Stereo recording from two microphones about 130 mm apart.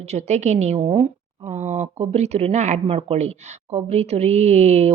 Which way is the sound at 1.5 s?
60° right (ahead or behind).